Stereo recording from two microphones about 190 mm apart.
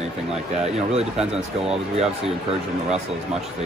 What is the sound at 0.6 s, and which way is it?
Speech, 35° right (ahead or behind).